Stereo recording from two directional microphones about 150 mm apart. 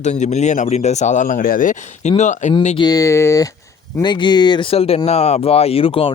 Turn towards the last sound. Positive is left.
turn(degrees=40)  # may be behind; listen again after turning